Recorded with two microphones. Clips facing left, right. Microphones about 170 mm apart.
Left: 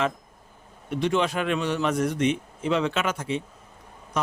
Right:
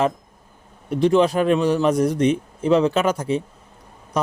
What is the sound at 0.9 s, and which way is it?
A man's voice, 35° right (ahead or behind).